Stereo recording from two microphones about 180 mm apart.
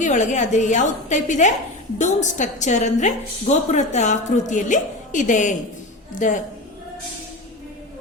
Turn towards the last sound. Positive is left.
turn(degrees=45)  # may be behind; listen again after turning